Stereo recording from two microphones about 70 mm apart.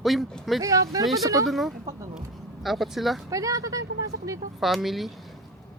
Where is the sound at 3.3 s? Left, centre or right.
Right.